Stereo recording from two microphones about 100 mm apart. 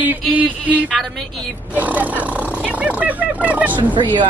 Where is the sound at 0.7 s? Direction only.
15° right (ahead or behind).